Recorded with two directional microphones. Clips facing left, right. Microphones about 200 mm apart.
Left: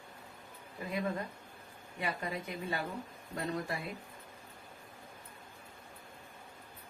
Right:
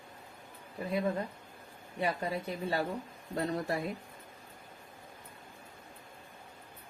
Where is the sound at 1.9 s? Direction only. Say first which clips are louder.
Right 4 dB; 35° right (ahead or behind).